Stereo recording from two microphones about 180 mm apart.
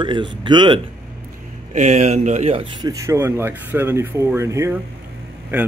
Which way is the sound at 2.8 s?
15° right (ahead or behind).